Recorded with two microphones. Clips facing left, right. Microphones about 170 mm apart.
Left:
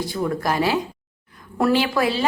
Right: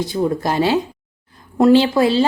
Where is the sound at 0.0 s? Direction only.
25° right (ahead or behind).